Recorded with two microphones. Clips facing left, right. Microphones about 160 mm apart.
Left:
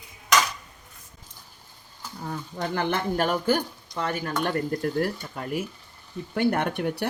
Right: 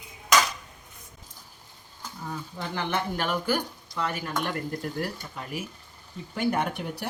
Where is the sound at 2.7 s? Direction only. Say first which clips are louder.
Left 4 dB; 40° left (ahead or behind).